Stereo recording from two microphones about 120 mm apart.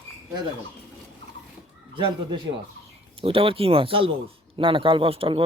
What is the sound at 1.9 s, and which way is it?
Speech, 40° right (ahead or behind).